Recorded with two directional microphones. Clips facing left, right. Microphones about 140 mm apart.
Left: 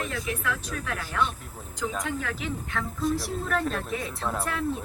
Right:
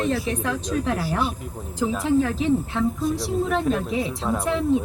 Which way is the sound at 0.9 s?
35° right (ahead or behind).